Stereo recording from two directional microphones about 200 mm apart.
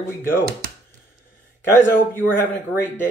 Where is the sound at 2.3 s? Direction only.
10° left (ahead or behind).